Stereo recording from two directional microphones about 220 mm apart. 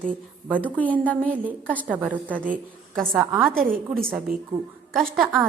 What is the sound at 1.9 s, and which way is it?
A woman's voice, 5° right (ahead or behind).